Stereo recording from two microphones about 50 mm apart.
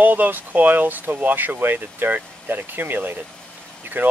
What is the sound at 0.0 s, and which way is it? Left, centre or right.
Speech, right.